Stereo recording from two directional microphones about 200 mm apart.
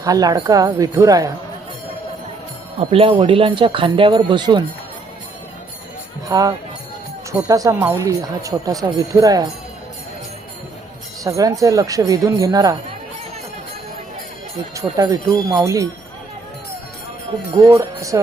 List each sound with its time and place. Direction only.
0.0 s speech: 20° right (ahead or behind)
2.9 s speech: 30° right (ahead or behind)
6.2 s speech: 20° right (ahead or behind)
11.2 s speech: 15° right (ahead or behind)
14.8 s speech: 15° right (ahead or behind)
17.5 s speech: 15° right (ahead or behind)